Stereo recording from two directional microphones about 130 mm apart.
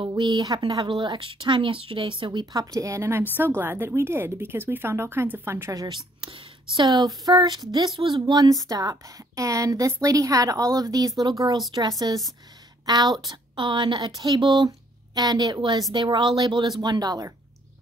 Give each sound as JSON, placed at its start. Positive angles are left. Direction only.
{"t": 0.0, "sound": "speech", "side_deg": -35}
{"t": 6.2, "sound": "speech", "side_deg": -40}